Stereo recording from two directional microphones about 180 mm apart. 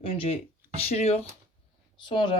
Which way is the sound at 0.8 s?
35° left (ahead or behind).